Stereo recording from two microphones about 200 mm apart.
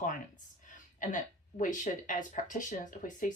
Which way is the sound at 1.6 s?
40° left (ahead or behind).